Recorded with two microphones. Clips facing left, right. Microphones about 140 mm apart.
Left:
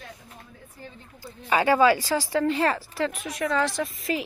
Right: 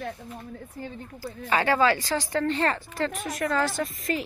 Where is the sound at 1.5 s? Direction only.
15° left (ahead or behind).